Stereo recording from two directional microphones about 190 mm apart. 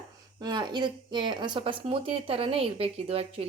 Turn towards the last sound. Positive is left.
turn(degrees=-30)  # may be behind; listen again after turning